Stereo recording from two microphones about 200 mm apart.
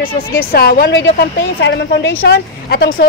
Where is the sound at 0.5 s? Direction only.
50° left (ahead or behind).